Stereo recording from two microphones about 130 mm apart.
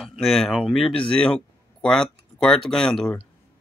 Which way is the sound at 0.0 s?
Centre (ahead or behind).